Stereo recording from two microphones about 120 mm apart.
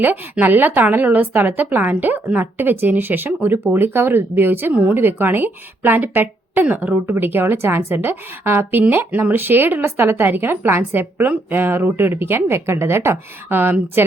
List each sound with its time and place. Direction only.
0.0 s a woman's voice: 15° right (ahead or behind)